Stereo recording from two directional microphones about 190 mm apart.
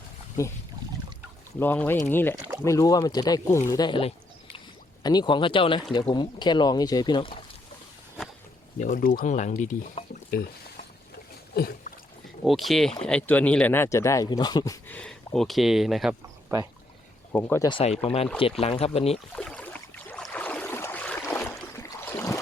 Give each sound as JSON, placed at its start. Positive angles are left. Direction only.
{"t": 1.5, "sound": "speech", "side_deg": 10}
{"t": 8.8, "sound": "speech", "side_deg": 45}
{"t": 11.5, "sound": "a sound", "side_deg": 50}
{"t": 12.5, "sound": "speech", "side_deg": 0}
{"t": 14.9, "sound": "speech", "side_deg": 5}
{"t": 16.5, "sound": "speech", "side_deg": -15}
{"t": 17.3, "sound": "speech", "side_deg": 10}
{"t": 17.7, "sound": "speech", "side_deg": 30}
{"t": 19.3, "sound": "a sound", "side_deg": 5}